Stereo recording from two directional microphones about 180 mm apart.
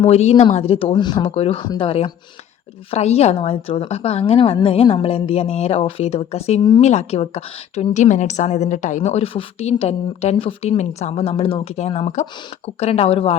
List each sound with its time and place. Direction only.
0.0 s a woman's voice: 35° left (ahead or behind)